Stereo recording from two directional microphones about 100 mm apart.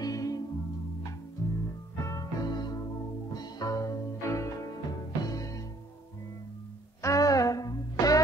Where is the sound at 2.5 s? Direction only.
45° left (ahead or behind).